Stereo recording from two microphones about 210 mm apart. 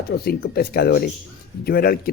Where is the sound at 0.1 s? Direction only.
50° left (ahead or behind).